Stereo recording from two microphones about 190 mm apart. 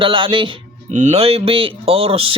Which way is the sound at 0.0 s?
25° right (ahead or behind).